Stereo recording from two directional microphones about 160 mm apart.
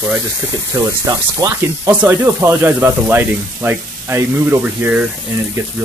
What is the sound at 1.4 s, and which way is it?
Speech, 10° right (ahead or behind).